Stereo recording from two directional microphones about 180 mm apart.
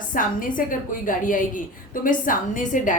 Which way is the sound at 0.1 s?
50° left (ahead or behind).